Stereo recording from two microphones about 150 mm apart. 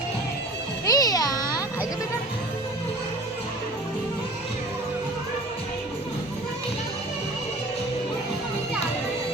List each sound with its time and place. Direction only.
0.9 s music: 25° left (ahead or behind)